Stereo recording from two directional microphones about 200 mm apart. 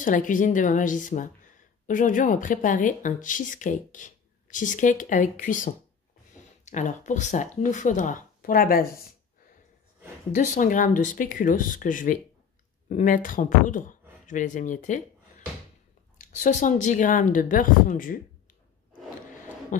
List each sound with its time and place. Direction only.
0.0 s speech: 40° left (ahead or behind)
10.3 s speech: 40° left (ahead or behind)
19.7 s a sound: 40° left (ahead or behind)